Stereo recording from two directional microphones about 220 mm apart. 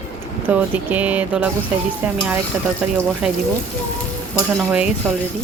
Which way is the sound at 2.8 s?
5° right (ahead or behind).